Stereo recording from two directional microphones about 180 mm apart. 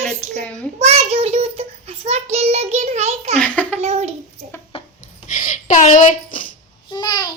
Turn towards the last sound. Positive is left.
turn(degrees=25)  # may be behind; listen again after turning